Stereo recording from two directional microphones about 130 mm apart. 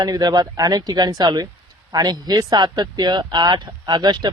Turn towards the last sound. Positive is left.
turn(degrees=-35)  # may be behind; listen again after turning